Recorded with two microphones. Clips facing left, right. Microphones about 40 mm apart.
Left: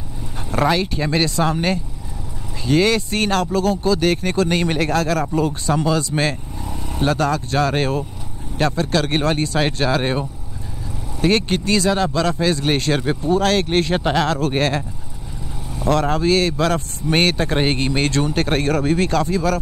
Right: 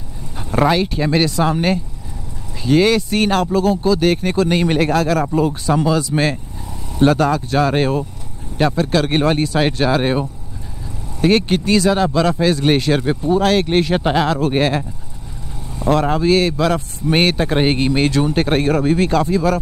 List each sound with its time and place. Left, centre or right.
0.5 s speech: centre
13.0 s speech: centre
13.3 s speech: centre